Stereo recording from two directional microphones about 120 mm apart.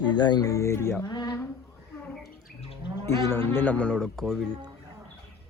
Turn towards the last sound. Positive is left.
turn(degrees=0)  # may be behind; listen again after turning